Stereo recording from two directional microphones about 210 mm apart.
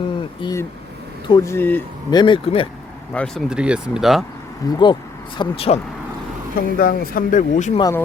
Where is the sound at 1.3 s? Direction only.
10° left (ahead or behind).